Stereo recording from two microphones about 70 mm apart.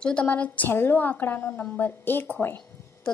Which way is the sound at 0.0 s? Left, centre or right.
Centre.